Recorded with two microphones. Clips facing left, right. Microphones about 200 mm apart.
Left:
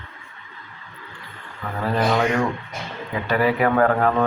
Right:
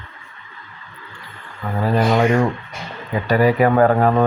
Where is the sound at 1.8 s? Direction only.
15° right (ahead or behind).